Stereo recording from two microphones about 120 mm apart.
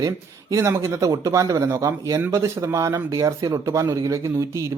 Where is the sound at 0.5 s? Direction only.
25° right (ahead or behind).